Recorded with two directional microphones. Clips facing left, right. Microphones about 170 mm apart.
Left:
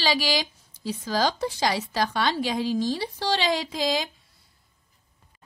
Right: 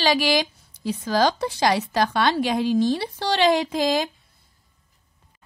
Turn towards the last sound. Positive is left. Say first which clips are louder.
# right 5 dB
turn(degrees=-50)  # may be behind; listen again after turning